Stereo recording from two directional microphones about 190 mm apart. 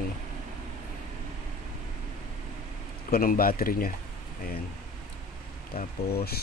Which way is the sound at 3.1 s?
50° left (ahead or behind).